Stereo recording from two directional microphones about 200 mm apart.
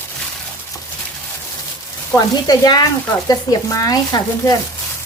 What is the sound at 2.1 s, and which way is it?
Speech, 20° left (ahead or behind).